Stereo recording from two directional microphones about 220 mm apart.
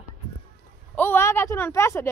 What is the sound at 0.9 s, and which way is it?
A woman's voice, 10° left (ahead or behind).